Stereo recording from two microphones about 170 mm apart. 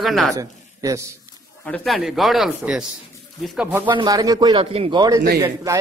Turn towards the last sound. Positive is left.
turn(degrees=-20)  # may be behind; listen again after turning